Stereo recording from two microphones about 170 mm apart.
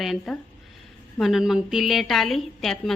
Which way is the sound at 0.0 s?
Centre (ahead or behind).